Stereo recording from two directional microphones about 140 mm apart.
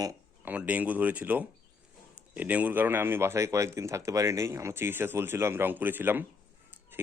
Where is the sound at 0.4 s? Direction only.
10° right (ahead or behind).